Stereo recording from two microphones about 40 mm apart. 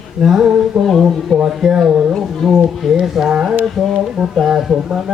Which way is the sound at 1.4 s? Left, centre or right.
Centre.